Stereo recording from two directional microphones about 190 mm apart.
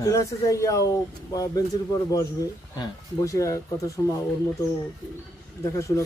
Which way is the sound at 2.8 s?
15° left (ahead or behind).